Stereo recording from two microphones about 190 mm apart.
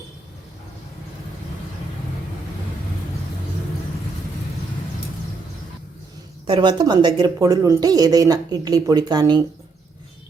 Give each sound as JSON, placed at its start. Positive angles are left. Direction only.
{"t": 6.5, "sound": "speech", "side_deg": -25}